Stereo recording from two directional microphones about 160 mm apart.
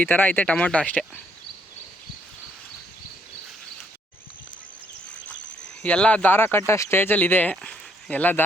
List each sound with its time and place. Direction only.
0.0 s speech: 10° left (ahead or behind)
5.8 s speech: 10° left (ahead or behind)